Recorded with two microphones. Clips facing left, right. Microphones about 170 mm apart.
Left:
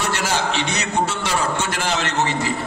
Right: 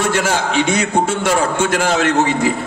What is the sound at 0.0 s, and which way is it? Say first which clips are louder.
A man's voice: right 5 dB; 50° right (ahead or behind).